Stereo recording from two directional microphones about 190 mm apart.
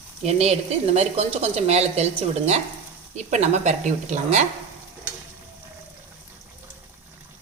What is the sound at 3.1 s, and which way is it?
Speech, 35° right (ahead or behind).